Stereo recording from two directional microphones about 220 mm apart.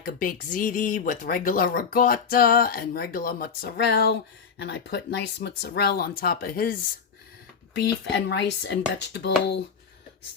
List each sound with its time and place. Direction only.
0.0 s speech: 40° left (ahead or behind)
8.1 s speech: 50° left (ahead or behind)